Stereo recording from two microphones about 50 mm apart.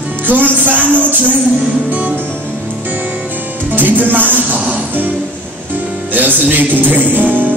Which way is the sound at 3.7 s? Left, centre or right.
Right.